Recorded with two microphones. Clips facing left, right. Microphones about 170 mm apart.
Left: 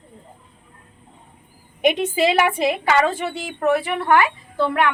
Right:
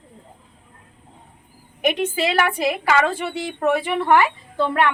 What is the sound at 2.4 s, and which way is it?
Speech, 25° left (ahead or behind).